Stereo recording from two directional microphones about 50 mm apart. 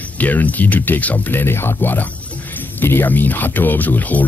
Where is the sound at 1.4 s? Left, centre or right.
Left.